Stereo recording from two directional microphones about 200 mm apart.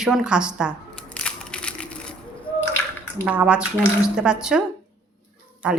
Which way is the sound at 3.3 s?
5° right (ahead or behind).